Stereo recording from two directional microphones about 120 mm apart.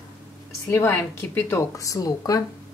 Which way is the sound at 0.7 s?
15° left (ahead or behind).